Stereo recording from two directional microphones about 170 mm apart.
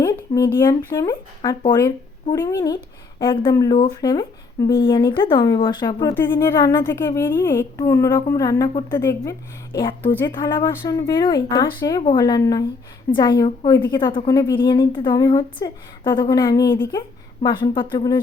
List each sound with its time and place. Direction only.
0.0 s a woman's voice: 20° left (ahead or behind)
17.4 s a woman's voice: 25° left (ahead or behind)